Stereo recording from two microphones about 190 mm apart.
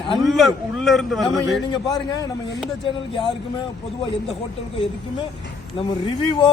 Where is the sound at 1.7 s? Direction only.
20° left (ahead or behind).